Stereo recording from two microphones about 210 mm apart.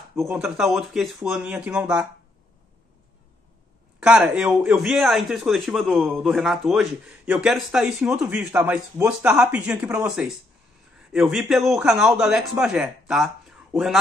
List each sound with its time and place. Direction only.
0.1 s a man's voice: centre (ahead or behind)
4.0 s a man's voice: 5° right (ahead or behind)